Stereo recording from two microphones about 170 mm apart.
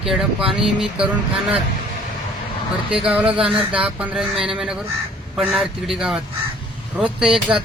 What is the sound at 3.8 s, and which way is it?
Speech, 5° right (ahead or behind).